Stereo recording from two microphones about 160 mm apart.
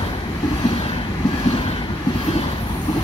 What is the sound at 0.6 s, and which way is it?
Vehicle, 35° left (ahead or behind).